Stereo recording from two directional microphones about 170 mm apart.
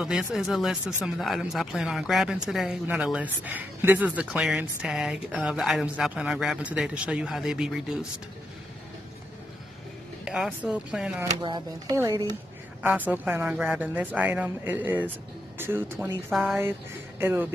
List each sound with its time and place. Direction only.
0.0 s speech: 5° right (ahead or behind)
10.2 s speech: 5° right (ahead or behind)
11.4 s speech: 20° right (ahead or behind)
12.8 s speech: 10° right (ahead or behind)
16.3 s speech: centre (ahead or behind)
17.2 s speech: 15° right (ahead or behind)